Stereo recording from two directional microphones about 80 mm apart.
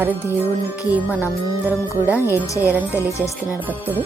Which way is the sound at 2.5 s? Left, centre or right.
Left.